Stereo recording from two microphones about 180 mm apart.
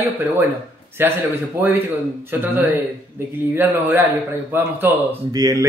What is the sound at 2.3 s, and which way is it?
Speech, 10° right (ahead or behind).